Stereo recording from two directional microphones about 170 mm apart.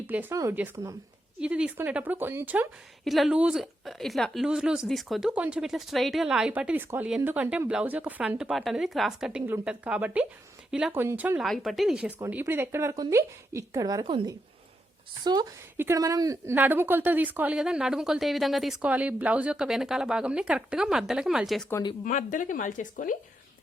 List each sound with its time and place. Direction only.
0.1 s speech: 10° right (ahead or behind)
3.0 s a woman's voice: centre (ahead or behind)
11.3 s a woman's voice: centre (ahead or behind)
21.7 s speech: 20° left (ahead or behind)
22.0 s speech: 50° left (ahead or behind)